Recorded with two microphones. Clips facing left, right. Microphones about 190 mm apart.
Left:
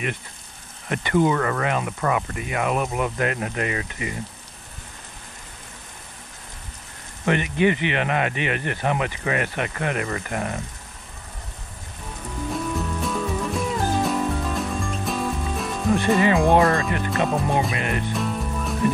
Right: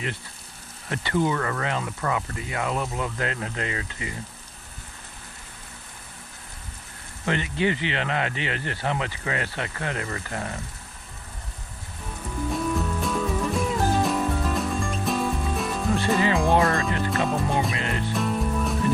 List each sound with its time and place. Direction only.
0.8 s speech: 20° left (ahead or behind)
1.3 s speech: 40° left (ahead or behind)
1.6 s speech: 20° left (ahead or behind)
7.2 s speech: 20° left (ahead or behind)
13.0 s music: centre (ahead or behind)
16.2 s speech: 20° left (ahead or behind)
17.3 s music: centre (ahead or behind)
17.7 s music: 20° left (ahead or behind)
18.1 s music: centre (ahead or behind)